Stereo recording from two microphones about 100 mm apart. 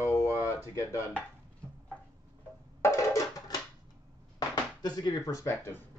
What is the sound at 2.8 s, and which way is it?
Music, 30° left (ahead or behind).